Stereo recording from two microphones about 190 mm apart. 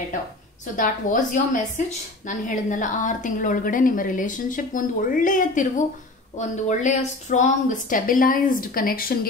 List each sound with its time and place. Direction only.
0.7 s a woman's voice: 45° left (ahead or behind)